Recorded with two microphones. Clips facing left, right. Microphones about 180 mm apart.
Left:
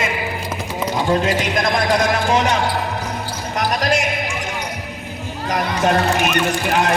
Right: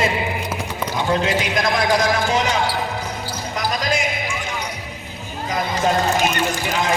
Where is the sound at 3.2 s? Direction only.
65° left (ahead or behind).